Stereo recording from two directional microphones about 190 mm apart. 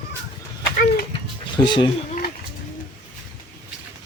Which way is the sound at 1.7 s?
25° left (ahead or behind).